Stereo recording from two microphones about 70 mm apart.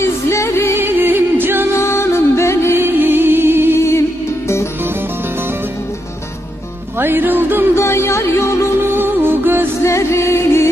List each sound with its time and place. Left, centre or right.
0.0 s music: left
0.8 s music: right
1.8 s music: left
2.7 s music: right
3.8 s music: left
7.0 s music: right
7.8 s music: left
8.8 s music: right
9.8 s music: left